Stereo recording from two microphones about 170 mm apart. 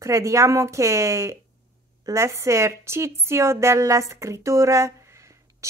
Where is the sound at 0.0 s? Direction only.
15° right (ahead or behind).